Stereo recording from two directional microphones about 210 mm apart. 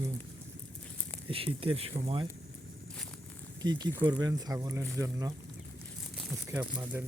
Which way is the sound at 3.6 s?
20° right (ahead or behind).